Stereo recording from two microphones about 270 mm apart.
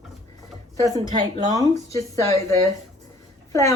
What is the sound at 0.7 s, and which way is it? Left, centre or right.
A woman's voice, centre.